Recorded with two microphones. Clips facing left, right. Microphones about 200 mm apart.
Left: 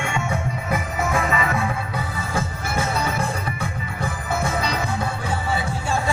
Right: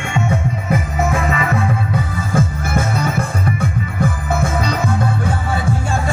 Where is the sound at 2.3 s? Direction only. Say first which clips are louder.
Right 8 dB; 50° right (ahead or behind).